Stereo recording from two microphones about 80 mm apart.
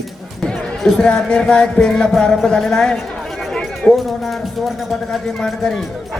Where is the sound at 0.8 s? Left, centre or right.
Centre.